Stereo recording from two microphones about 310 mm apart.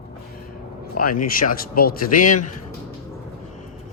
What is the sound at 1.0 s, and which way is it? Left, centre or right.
Speech, left.